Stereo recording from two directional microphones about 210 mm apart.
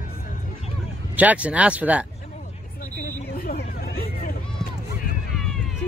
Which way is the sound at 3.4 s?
45° left (ahead or behind).